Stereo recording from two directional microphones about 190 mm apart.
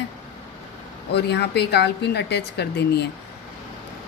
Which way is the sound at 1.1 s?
60° left (ahead or behind).